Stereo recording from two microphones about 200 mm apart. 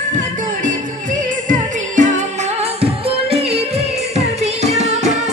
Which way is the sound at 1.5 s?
40° right (ahead or behind).